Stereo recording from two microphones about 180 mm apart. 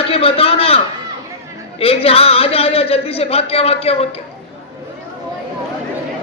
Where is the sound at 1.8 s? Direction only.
35° left (ahead or behind).